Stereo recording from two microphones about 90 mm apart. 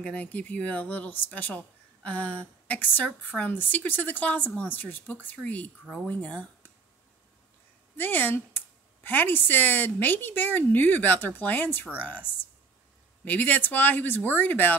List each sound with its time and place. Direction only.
0.0 s speech: 15° left (ahead or behind)
8.0 s speech: 20° left (ahead or behind)